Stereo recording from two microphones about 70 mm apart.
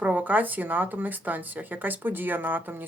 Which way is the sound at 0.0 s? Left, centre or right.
Right.